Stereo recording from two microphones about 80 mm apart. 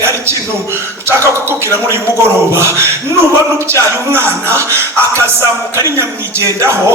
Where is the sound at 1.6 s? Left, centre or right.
Right.